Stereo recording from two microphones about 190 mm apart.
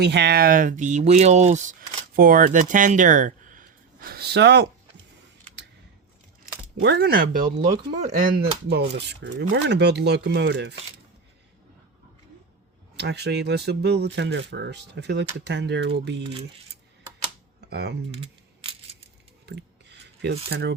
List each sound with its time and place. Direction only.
0.0 s speech: 65° right (ahead or behind)
6.8 s speech: 60° right (ahead or behind)
13.0 s speech: 60° right (ahead or behind)
17.7 s speech: 60° right (ahead or behind)
18.2 s camera: 30° right (ahead or behind)
19.5 s a sound: 65° right (ahead or behind)
20.5 s speech: 65° right (ahead or behind)